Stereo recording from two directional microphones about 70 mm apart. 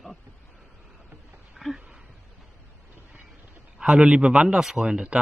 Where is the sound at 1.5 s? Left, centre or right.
Centre.